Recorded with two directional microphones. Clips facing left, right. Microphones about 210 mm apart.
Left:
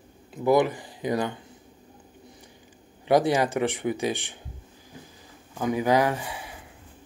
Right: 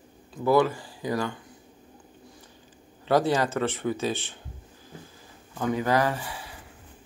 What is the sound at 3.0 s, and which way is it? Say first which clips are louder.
Speech: left 2 dB; 15° left (ahead or behind).